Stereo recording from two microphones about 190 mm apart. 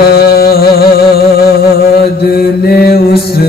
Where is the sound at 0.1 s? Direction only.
55° left (ahead or behind).